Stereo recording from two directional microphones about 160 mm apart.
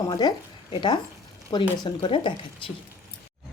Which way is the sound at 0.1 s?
25° left (ahead or behind).